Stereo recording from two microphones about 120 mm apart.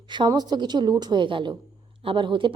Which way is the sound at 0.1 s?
35° right (ahead or behind).